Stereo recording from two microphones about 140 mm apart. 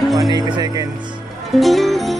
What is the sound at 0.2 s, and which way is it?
Speech, 30° right (ahead or behind).